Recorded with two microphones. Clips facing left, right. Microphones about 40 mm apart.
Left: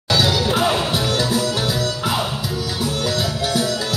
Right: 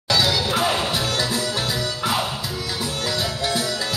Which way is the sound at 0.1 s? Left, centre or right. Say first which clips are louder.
Left 2 dB; centre.